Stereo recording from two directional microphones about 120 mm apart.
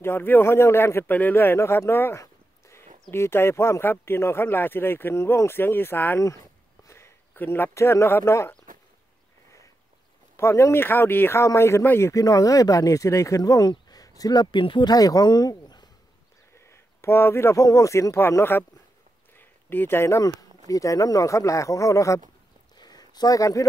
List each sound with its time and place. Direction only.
0.0 s speech: 20° left (ahead or behind)
10.3 s speech: 20° left (ahead or behind)
16.5 s speech: 20° left (ahead or behind)
22.8 s a sound: 35° left (ahead or behind)